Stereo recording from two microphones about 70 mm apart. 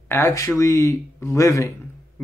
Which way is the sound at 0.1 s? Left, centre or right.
Left.